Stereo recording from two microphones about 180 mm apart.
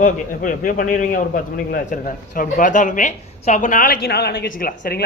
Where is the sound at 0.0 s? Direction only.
50° left (ahead or behind).